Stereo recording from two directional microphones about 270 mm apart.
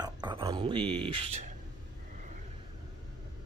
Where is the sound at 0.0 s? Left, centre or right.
Centre.